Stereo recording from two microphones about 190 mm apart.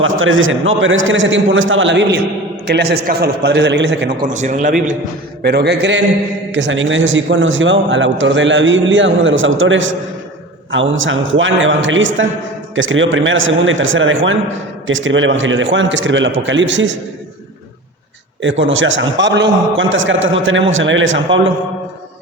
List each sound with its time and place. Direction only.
0.0 s a man's voice: 90° right; by 4.1 s 70° right (ahead or behind)
4.3 s a man's voice: 40° right (ahead or behind)
5.4 s a man's voice: 60° right (ahead or behind)
6.5 s a man's voice: 75° right (ahead or behind)
18.4 s a man's voice: 85° right